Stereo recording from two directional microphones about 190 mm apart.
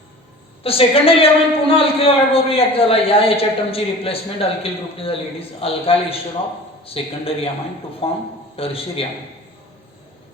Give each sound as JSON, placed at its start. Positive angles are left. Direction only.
{"t": 0.6, "sound": "a woman's voice", "side_deg": 30}